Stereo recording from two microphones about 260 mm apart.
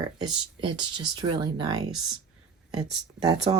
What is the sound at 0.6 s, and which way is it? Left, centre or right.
Speech, centre.